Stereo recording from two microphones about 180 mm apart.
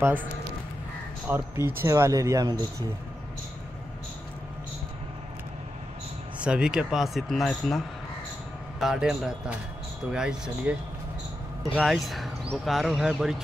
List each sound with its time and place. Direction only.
0.0 s speech: 10° right (ahead or behind)
6.4 s speech: 5° right (ahead or behind)